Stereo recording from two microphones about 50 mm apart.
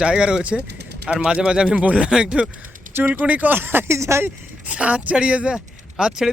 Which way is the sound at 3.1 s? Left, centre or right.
Right.